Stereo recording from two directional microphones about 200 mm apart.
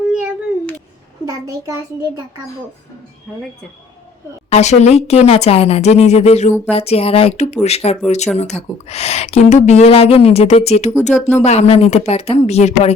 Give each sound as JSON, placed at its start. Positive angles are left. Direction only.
{"t": 0.1, "sound": "cat", "side_deg": -5}
{"t": 1.2, "sound": "a child's voice", "side_deg": -15}
{"t": 4.4, "sound": "speech", "side_deg": 35}